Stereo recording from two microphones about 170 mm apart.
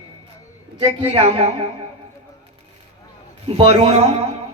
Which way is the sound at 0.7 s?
35° right (ahead or behind).